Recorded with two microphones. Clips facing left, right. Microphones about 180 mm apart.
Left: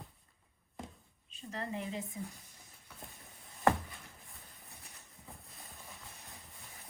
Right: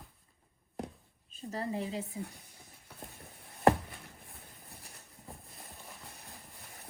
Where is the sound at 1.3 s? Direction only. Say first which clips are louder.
Right 4 dB; 40° right (ahead or behind).